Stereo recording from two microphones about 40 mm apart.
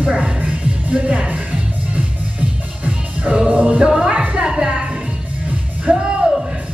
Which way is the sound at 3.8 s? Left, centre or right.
Centre.